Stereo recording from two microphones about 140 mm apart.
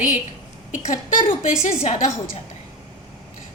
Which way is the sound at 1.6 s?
50° left (ahead or behind).